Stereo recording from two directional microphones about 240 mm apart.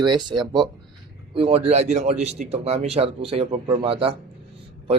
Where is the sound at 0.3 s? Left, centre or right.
Centre.